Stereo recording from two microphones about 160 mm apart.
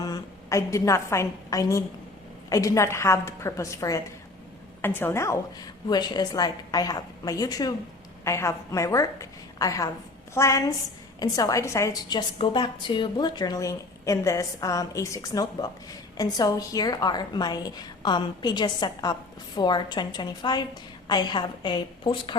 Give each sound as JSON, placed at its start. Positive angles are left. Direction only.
{"t": 0.0, "sound": "a woman's voice", "side_deg": 20}